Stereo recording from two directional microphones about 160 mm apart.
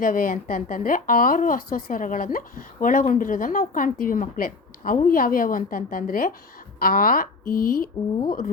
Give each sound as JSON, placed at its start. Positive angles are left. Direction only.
{"t": 0.0, "sound": "speech", "side_deg": 60}